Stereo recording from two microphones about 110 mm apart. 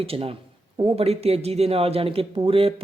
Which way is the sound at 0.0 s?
60° right (ahead or behind).